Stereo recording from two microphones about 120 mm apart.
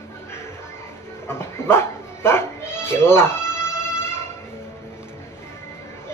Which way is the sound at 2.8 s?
20° left (ahead or behind).